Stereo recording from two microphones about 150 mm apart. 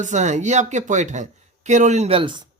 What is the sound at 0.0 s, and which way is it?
Speech, 55° right (ahead or behind).